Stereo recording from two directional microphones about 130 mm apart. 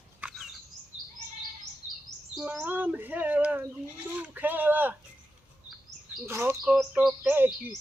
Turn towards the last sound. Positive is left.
turn(degrees=-15)  # may be behind; listen again after turning